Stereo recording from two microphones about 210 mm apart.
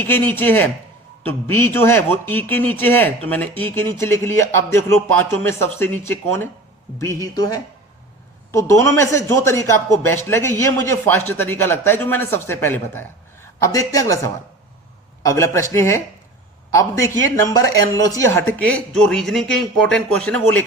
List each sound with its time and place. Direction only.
0.0 s a man's voice: 10° left (ahead or behind)